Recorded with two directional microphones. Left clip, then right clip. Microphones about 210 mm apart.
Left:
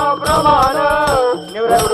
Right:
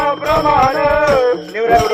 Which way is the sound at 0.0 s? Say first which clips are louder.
Left 1 dB; 30° right (ahead or behind).